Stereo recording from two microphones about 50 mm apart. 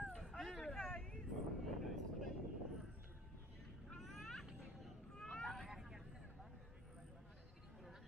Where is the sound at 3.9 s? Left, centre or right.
Centre.